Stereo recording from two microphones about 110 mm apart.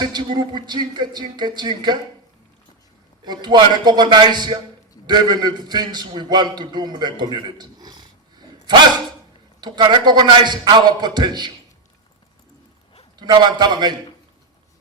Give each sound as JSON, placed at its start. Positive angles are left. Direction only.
{"t": 0.0, "sound": "speech", "side_deg": -40}
{"t": 3.2, "sound": "a man's voice", "side_deg": -40}
{"t": 13.1, "sound": "a man's voice", "side_deg": -40}